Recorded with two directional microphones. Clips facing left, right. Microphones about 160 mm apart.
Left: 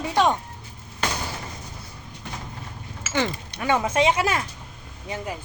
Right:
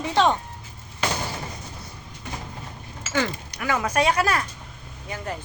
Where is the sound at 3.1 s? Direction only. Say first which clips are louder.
Even; 25° left (ahead or behind).